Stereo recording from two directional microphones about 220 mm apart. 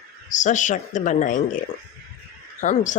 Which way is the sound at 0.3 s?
35° left (ahead or behind).